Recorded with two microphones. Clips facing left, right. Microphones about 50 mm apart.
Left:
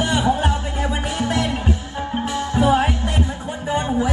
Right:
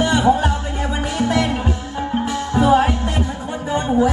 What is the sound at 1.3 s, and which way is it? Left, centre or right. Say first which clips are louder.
Music: right 3 dB; right.